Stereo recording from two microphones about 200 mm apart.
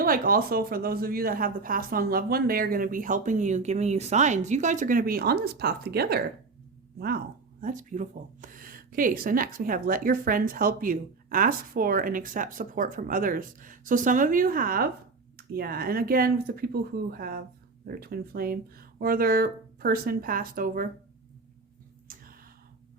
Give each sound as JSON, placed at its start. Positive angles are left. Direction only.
{"t": 0.0, "sound": "speech", "side_deg": -45}
{"t": 7.6, "sound": "speech", "side_deg": -40}
{"t": 22.0, "sound": "a sound", "side_deg": -45}